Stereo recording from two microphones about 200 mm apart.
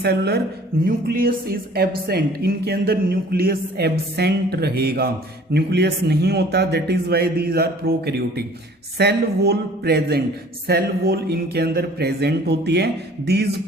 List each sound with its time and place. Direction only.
0.0 s a man's voice: 55° right (ahead or behind)